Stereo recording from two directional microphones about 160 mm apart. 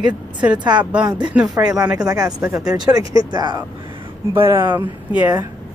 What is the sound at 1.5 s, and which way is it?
Speech, 25° right (ahead or behind).